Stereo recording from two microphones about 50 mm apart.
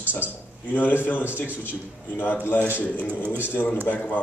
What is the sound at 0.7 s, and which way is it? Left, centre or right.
A man's voice, left.